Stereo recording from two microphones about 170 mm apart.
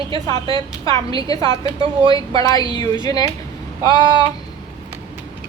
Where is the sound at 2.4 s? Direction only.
20° left (ahead or behind).